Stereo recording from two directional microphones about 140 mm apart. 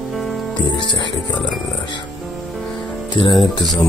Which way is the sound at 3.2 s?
35° left (ahead or behind).